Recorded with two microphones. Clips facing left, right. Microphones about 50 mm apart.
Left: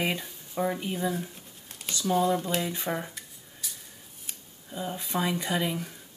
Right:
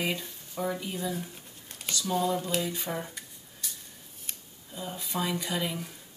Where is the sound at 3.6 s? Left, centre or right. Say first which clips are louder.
Even; centre.